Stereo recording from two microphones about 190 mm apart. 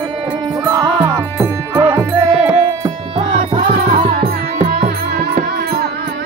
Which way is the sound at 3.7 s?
50° right (ahead or behind).